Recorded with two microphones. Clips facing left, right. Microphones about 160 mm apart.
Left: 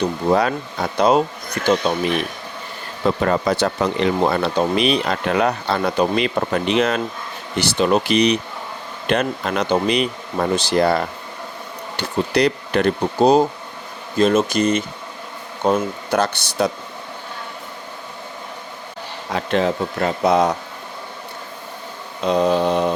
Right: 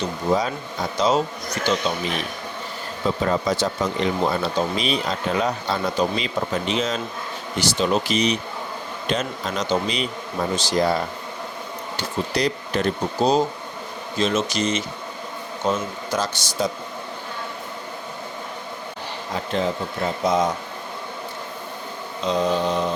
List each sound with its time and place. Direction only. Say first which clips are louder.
0.0 s speech: left 4 dB; 65° left (ahead or behind)
3.0 s speech: left 4 dB; 65° left (ahead or behind)
19.3 s speech: left 5 dB; 70° left (ahead or behind)
22.3 s speech: left 4 dB; 60° left (ahead or behind)